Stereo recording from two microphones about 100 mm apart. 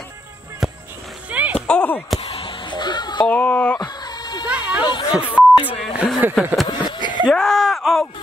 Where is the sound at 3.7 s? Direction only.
40° left (ahead or behind).